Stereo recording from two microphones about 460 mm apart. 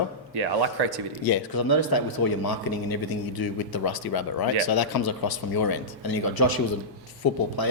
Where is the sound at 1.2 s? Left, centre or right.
Left.